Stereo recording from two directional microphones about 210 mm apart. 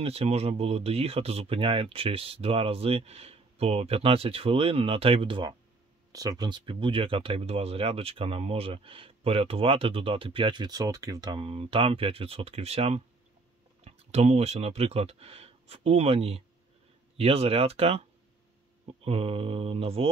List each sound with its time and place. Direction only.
0.0 s speech: 30° right (ahead or behind)